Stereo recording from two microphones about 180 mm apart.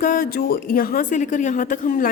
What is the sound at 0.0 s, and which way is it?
A woman's voice, 50° left (ahead or behind).